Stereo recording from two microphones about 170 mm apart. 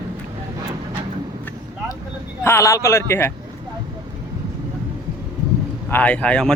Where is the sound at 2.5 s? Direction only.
15° left (ahead or behind).